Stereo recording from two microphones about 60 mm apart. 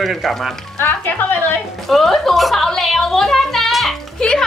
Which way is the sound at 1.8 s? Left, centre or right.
Centre.